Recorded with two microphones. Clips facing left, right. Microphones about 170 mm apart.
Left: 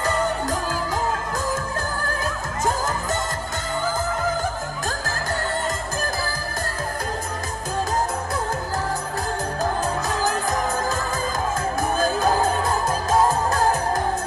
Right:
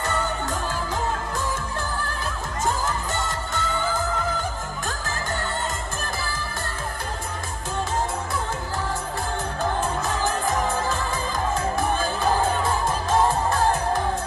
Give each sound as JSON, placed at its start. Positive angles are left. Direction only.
{"t": 2.6, "sound": "music", "side_deg": 40}
{"t": 12.0, "sound": "music", "side_deg": 40}
{"t": 13.5, "sound": "music", "side_deg": 40}